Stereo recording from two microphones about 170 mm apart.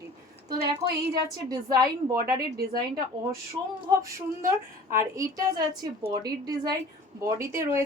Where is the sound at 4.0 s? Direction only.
20° right (ahead or behind).